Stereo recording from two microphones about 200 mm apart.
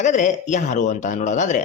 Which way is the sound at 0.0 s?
35° left (ahead or behind).